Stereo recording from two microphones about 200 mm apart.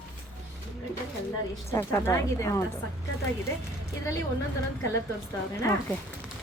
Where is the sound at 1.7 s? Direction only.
15° left (ahead or behind).